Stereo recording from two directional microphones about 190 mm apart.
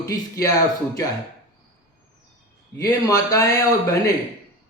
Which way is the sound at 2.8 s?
20° left (ahead or behind).